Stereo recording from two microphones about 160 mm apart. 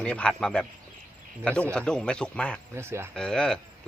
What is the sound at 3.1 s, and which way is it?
Speech, 5° left (ahead or behind).